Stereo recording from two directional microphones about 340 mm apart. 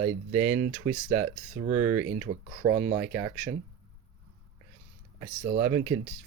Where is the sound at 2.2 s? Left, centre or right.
Centre.